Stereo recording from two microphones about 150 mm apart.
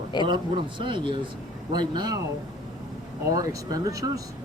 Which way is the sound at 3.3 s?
25° right (ahead or behind).